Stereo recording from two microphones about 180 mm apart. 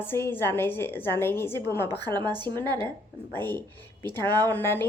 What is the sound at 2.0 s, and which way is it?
Speech, 25° right (ahead or behind).